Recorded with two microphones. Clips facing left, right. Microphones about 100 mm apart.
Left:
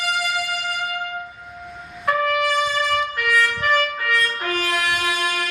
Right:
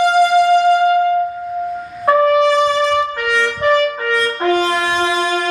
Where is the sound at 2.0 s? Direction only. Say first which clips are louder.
Right 9 dB; 25° right (ahead or behind).